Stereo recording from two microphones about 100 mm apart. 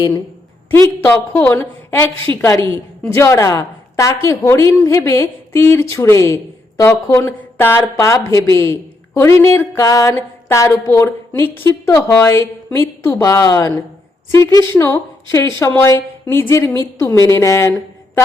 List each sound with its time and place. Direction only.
0.7 s a woman's voice: 20° left (ahead or behind)
11.9 s a woman's voice: 30° left (ahead or behind)